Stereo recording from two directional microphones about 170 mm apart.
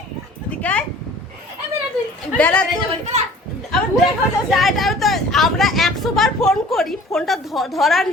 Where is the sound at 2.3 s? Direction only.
10° left (ahead or behind).